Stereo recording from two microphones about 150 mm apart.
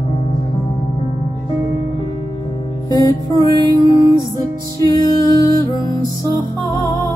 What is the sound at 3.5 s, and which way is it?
Music, 30° right (ahead or behind).